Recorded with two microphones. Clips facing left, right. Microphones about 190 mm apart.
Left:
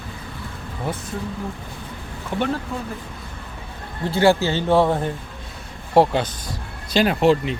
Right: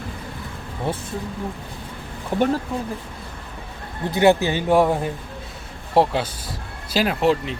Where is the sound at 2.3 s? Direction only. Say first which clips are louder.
Right 4 dB; 40° right (ahead or behind).